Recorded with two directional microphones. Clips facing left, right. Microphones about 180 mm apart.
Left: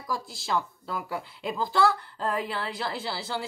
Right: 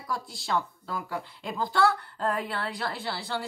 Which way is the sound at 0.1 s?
Centre (ahead or behind).